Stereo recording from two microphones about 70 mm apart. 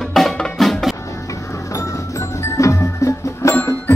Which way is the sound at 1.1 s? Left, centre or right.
Left.